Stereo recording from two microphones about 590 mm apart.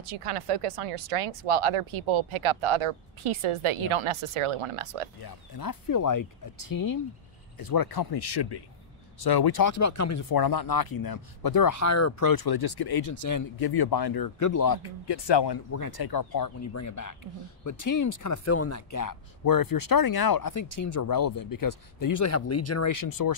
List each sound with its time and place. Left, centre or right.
0.1 s speech: right
5.2 s speech: left